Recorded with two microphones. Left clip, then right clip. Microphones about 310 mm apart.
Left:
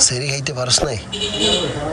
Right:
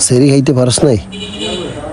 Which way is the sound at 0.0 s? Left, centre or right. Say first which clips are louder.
Right 9 dB; centre.